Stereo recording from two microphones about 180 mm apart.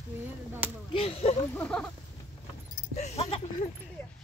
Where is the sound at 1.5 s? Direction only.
5° left (ahead or behind).